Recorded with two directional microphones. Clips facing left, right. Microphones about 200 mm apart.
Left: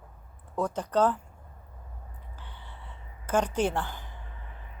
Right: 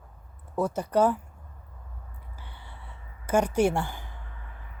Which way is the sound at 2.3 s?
10° right (ahead or behind).